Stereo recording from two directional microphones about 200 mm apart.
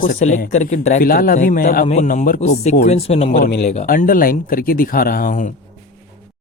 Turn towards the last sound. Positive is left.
turn(degrees=45)  # may be behind; listen again after turning